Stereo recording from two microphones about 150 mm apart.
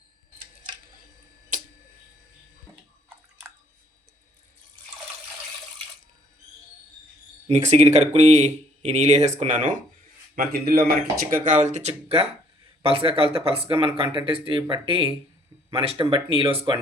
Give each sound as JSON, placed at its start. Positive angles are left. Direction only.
{"t": 7.4, "sound": "speech", "side_deg": -50}
{"t": 10.3, "sound": "speech", "side_deg": -90}
{"t": 11.3, "sound": "speech", "side_deg": -60}